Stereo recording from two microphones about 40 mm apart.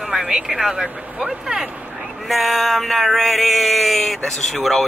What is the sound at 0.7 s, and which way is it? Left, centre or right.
Speech, right.